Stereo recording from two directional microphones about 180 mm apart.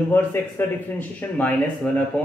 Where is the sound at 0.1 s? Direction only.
10° left (ahead or behind).